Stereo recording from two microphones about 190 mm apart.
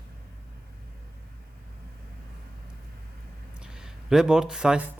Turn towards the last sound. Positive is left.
turn(degrees=-5)  # may be behind; listen again after turning